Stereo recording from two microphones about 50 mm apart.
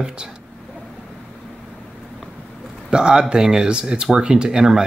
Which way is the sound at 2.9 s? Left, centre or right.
Centre.